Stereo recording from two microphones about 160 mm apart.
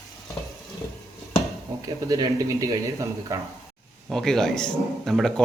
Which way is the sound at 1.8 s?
20° right (ahead or behind).